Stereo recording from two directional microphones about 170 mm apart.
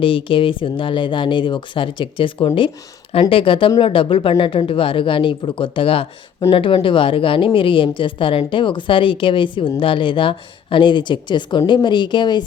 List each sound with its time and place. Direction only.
0.0 s a woman's voice: 30° left (ahead or behind)